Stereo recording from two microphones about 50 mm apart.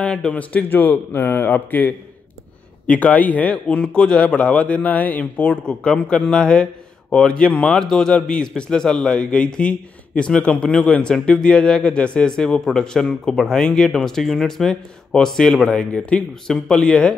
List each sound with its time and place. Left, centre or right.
0.0 s a man's voice: centre
0.3 s a man's voice: left; by 15.8 s centre
15.8 s speech: left
16.2 s speech: centre